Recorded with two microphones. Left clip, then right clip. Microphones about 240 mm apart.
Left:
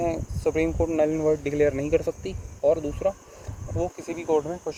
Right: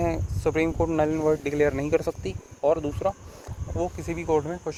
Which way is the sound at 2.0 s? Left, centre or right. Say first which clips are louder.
Left 1 dB; centre.